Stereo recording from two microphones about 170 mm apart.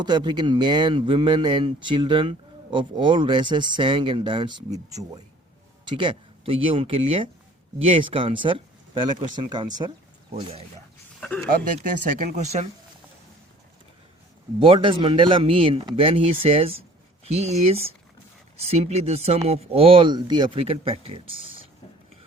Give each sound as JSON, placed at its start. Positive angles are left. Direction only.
{"t": 0.0, "sound": "a man's voice", "side_deg": -25}
{"t": 11.4, "sound": "speech", "side_deg": -55}
{"t": 14.6, "sound": "speech", "side_deg": -30}